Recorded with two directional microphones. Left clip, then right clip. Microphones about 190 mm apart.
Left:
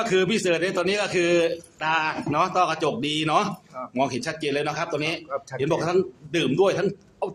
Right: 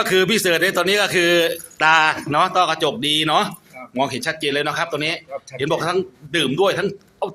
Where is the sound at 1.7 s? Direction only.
25° right (ahead or behind).